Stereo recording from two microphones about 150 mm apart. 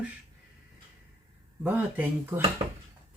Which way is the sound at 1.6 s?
10° right (ahead or behind).